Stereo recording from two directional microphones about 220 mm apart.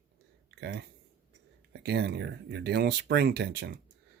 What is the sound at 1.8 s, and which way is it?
Speech, 50° right (ahead or behind).